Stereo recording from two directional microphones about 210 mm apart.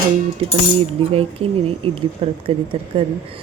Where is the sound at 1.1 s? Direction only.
25° right (ahead or behind).